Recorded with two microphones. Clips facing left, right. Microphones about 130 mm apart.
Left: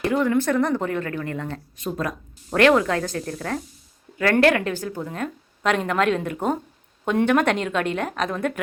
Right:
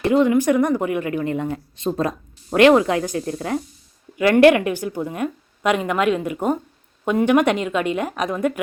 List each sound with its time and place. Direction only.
0.1 s a woman's voice: 20° right (ahead or behind)
1.7 s a woman's voice: 25° right (ahead or behind); by 8.6 s 10° right (ahead or behind)